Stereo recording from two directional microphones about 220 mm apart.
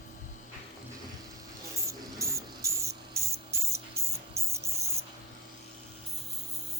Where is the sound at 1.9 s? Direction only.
15° right (ahead or behind).